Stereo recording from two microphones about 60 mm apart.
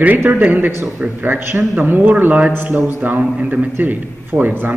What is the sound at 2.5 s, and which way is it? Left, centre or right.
Speech, right.